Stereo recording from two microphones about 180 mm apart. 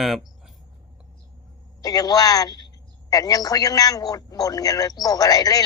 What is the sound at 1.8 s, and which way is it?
A man's voice, 20° left (ahead or behind).